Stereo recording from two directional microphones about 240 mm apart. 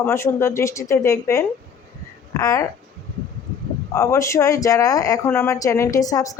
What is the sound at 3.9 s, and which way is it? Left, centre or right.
Speech, centre.